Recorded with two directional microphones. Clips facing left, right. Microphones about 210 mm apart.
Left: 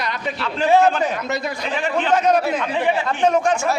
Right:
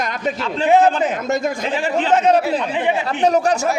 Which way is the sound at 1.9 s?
30° right (ahead or behind).